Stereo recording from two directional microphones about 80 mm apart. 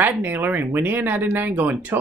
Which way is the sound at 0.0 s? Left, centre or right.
Right.